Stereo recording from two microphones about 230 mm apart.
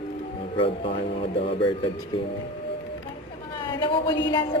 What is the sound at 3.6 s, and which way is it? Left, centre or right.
Speech, centre.